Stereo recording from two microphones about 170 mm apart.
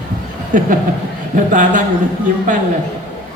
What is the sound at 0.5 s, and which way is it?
A man's voice, 50° right (ahead or behind).